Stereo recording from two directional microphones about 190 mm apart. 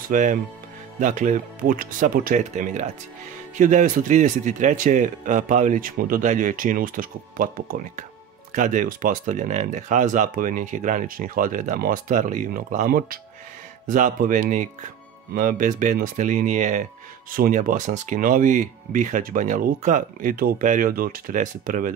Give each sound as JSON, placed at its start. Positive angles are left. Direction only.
{"t": 0.1, "sound": "speech", "side_deg": -45}